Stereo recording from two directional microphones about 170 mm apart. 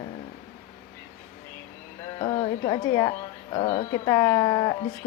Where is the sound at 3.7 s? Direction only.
40° left (ahead or behind).